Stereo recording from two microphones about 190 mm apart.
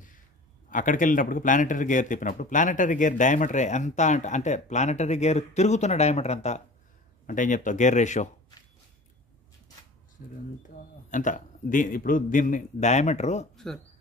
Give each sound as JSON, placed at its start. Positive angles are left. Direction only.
{"t": 0.7, "sound": "a man's voice", "side_deg": 45}
{"t": 10.2, "sound": "a man's voice", "side_deg": 45}